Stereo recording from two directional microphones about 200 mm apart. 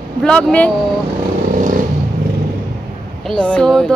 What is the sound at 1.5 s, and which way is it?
Vehicle, 40° right (ahead or behind).